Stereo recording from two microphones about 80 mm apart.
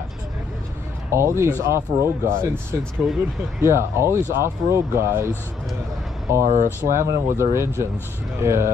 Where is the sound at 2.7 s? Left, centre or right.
Right.